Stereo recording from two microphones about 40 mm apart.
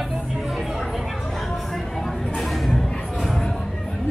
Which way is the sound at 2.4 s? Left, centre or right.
Centre.